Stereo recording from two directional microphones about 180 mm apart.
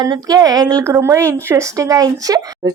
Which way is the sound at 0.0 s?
20° right (ahead or behind).